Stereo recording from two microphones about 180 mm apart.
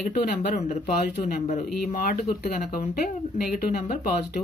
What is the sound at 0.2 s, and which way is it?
Speech, 50° left (ahead or behind).